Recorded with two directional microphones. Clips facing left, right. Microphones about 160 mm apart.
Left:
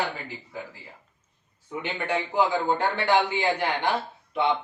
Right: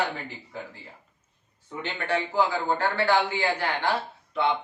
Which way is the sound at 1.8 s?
15° left (ahead or behind).